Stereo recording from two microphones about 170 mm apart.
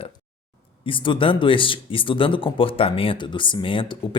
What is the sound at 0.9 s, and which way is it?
Speech, 30° left (ahead or behind).